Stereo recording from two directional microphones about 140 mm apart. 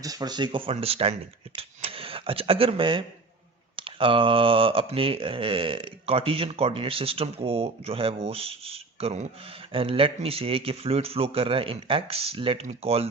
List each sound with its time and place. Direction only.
0.0 s mantra: 25° right (ahead or behind); by 1.1 s 45° right (ahead or behind)
1.5 s speech: 40° right (ahead or behind)
3.8 s mantra: 40° right (ahead or behind)
9.7 s mantra: 40° right (ahead or behind)
10.2 s speech: 45° right (ahead or behind)